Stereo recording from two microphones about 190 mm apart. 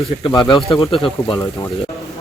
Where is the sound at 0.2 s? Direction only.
25° left (ahead or behind).